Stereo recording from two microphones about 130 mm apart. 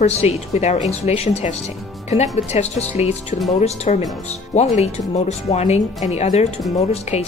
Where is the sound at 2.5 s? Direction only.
55° left (ahead or behind).